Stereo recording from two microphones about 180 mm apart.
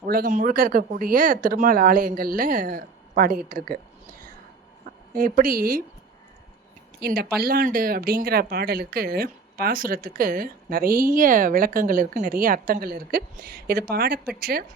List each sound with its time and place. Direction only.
0.1 s speech: 45° right (ahead or behind)
5.1 s speech: 50° right (ahead or behind)
7.0 s speech: 60° right (ahead or behind)